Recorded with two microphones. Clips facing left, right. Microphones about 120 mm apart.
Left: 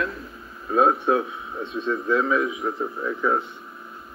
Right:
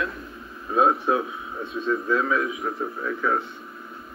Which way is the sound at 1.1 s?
25° left (ahead or behind).